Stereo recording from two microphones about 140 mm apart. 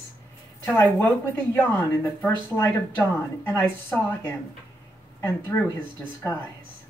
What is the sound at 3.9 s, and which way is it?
Speech, 10° left (ahead or behind).